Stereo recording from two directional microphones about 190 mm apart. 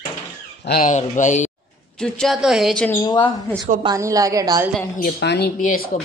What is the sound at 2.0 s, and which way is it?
Speech, centre (ahead or behind).